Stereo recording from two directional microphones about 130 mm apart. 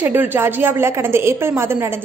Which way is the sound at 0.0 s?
15° right (ahead or behind).